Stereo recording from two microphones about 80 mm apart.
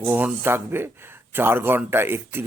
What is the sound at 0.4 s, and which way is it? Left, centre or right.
Speech, right.